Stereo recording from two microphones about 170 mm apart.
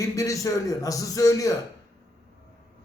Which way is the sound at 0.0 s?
20° left (ahead or behind).